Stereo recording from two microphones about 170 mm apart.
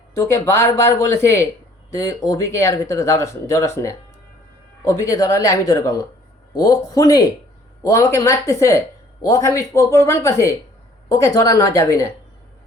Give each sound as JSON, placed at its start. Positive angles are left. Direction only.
{"t": 0.1, "sound": "speech", "side_deg": 15}